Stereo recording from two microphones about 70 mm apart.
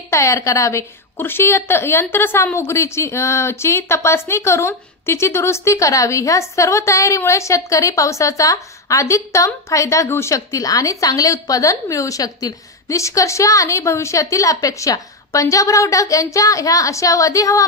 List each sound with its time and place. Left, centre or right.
0.1 s a woman's voice: left